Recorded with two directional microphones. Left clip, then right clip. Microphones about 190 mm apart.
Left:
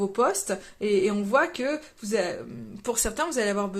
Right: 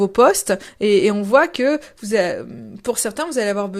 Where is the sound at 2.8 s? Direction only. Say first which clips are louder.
Right 5 dB; 30° right (ahead or behind).